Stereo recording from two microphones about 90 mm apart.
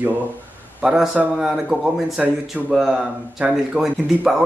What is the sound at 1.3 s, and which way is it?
A man's voice, 5° right (ahead or behind).